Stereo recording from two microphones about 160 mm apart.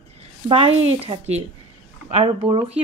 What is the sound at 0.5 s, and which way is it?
A woman's voice, 35° right (ahead or behind).